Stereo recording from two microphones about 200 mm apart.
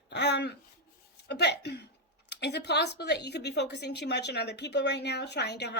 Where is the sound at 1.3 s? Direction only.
60° left (ahead or behind).